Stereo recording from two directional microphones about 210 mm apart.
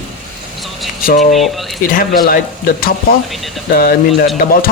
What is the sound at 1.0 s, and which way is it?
Speech, 45° left (ahead or behind).